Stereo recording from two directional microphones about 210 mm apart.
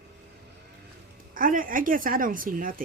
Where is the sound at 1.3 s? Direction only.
40° right (ahead or behind).